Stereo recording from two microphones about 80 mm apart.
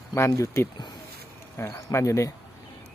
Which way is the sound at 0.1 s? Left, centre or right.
Left.